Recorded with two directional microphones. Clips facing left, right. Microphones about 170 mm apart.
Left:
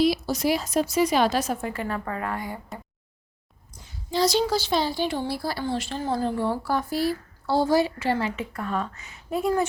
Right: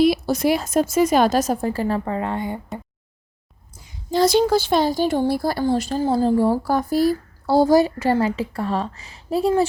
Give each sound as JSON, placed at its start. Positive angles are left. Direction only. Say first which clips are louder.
{"t": 0.0, "sound": "a woman's voice", "louder": "right 5 dB", "side_deg": -55}
{"t": 4.1, "sound": "speech", "louder": "right 6 dB", "side_deg": -55}